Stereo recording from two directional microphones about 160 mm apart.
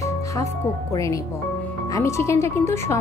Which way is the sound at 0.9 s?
20° left (ahead or behind).